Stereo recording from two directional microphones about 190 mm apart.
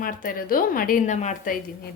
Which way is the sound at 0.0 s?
45° left (ahead or behind).